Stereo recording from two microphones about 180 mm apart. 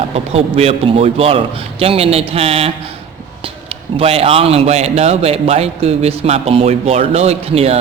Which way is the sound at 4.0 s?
35° right (ahead or behind).